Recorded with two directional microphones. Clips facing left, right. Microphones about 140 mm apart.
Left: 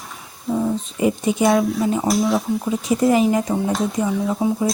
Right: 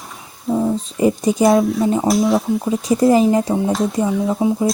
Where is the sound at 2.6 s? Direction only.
35° right (ahead or behind).